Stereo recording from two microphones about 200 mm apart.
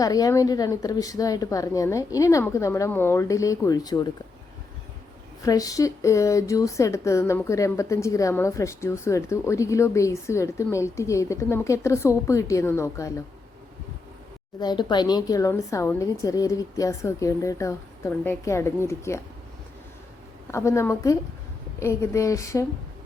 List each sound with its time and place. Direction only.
0.0 s speech: 15° left (ahead or behind)
5.4 s speech: 15° left (ahead or behind)
14.6 s speech: 20° left (ahead or behind)
20.5 s speech: 15° left (ahead or behind)